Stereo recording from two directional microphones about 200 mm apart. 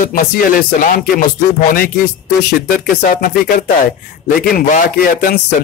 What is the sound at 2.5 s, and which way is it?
Speech, 45° left (ahead or behind).